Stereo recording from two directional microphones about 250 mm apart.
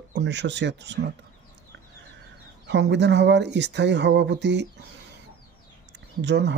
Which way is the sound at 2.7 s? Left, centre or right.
Right.